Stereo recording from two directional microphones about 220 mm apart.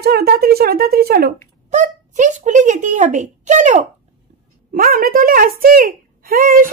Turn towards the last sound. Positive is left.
turn(degrees=-40)  # may be behind; listen again after turning